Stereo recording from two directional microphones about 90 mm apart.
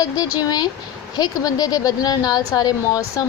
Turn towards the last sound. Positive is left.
turn(degrees=40)  # may be behind; listen again after turning